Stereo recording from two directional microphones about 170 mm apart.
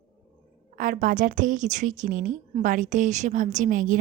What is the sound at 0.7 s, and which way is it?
A woman's voice, 55° right (ahead or behind).